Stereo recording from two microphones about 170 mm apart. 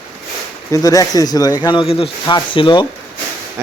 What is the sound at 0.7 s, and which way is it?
Speech, 20° left (ahead or behind).